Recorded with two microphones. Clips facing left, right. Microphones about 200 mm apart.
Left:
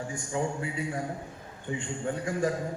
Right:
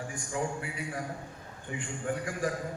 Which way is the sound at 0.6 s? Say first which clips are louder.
Left 5 dB; 25° left (ahead or behind).